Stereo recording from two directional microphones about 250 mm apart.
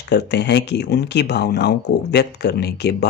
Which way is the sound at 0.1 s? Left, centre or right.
Left.